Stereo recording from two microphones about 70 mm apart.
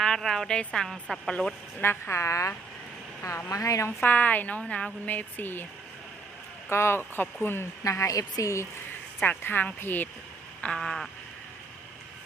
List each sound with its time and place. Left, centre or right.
0.0 s a woman's voice: centre
1.3 s a sound: centre
1.8 s a woman's voice: left
3.8 s speech: left
4.6 s a sound: centre
5.0 s speech: left
6.7 s speech: left
7.0 s speech: left
7.9 s a woman's voice: left
9.2 s speech: left
10.6 s a sound: centre